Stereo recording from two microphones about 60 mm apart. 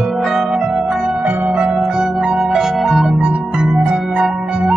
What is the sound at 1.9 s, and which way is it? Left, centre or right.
Music, centre.